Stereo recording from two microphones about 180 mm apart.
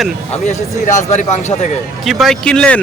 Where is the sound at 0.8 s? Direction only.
40° left (ahead or behind).